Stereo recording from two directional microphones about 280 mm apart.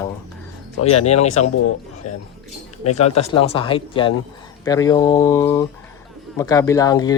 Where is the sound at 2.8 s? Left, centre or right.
Left.